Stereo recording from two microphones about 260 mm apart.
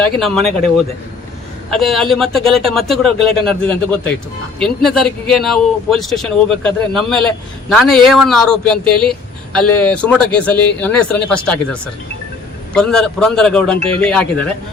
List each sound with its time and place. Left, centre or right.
0.2 s speech: centre
1.7 s speech: centre
12.7 s speech: centre
13.7 s speech: right
14.0 s speech: centre